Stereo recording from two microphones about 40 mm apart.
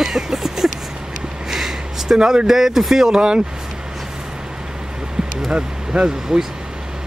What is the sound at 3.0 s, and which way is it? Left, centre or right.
Speech, right.